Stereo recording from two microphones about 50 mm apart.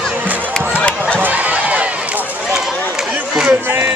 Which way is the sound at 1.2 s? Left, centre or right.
Right.